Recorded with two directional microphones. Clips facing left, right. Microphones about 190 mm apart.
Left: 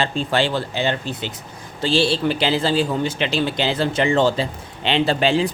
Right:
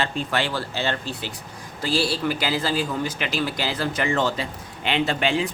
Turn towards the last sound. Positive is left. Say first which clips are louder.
# left 5 dB
turn(degrees=30)  # may be behind; listen again after turning